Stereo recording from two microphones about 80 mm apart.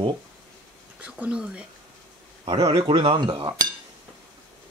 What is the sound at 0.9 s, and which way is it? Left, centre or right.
Speech, centre.